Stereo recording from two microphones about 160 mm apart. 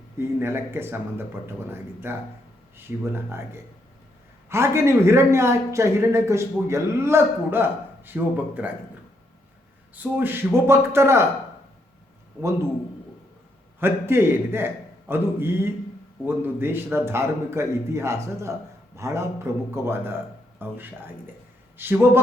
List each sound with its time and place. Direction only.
0.2 s a man's voice: 15° right (ahead or behind)
9.9 s a man's voice: 10° right (ahead or behind)
13.7 s a man's voice: 15° right (ahead or behind)